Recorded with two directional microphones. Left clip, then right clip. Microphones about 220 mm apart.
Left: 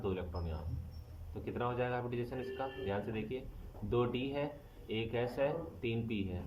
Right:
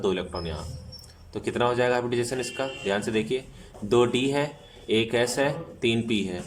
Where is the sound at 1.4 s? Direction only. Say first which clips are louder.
Right 13 dB; 30° right (ahead or behind).